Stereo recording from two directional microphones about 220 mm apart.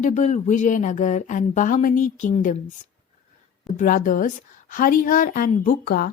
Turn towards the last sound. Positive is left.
turn(degrees=45)  # may be behind; listen again after turning